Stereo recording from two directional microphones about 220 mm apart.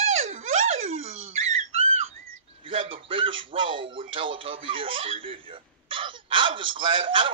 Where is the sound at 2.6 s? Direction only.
25° right (ahead or behind).